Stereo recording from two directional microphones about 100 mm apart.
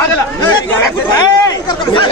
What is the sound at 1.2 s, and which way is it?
Speech, 45° left (ahead or behind).